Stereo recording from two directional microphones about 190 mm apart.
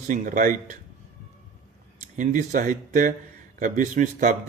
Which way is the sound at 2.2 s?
45° right (ahead or behind).